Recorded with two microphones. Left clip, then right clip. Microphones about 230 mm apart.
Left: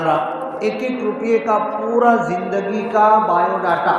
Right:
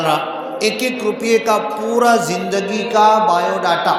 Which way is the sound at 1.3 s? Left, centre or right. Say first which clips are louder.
Right 1 dB; right.